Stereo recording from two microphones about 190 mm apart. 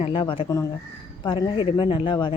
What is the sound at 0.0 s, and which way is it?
A man's voice, 25° left (ahead or behind).